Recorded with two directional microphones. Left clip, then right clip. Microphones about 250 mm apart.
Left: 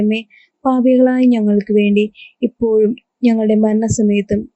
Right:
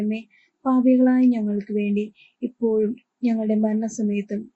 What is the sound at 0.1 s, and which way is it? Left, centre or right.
Speech, left.